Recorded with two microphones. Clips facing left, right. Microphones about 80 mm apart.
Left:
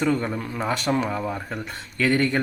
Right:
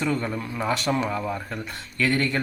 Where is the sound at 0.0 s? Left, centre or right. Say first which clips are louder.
Left 3 dB; left.